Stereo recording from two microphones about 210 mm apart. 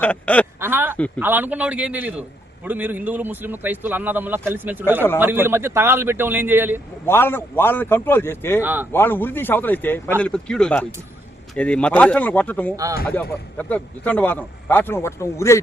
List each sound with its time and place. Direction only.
0.0 s speech: 5° left (ahead or behind)
0.6 s a sound: 10° right (ahead or behind)
1.2 s speech: 10° right (ahead or behind)
7.0 s speech: 10° left (ahead or behind)
8.6 s speech: 10° right (ahead or behind)
8.9 s speech: 10° left (ahead or behind)
12.7 s speech: 15° right (ahead or behind)
13.6 s speech: 5° left (ahead or behind)